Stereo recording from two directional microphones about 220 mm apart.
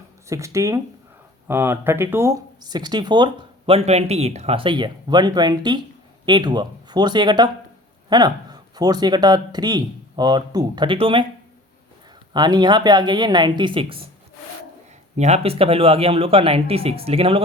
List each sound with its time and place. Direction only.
0.3 s speech: 15° right (ahead or behind)
12.3 s speech: 20° right (ahead or behind)
15.1 s speech: 30° right (ahead or behind)